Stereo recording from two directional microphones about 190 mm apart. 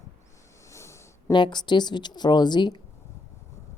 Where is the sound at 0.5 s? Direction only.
15° left (ahead or behind).